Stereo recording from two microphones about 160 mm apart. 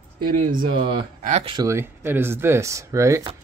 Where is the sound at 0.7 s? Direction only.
35° right (ahead or behind).